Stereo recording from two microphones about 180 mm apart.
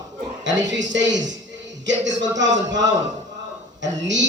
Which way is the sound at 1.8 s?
85° right.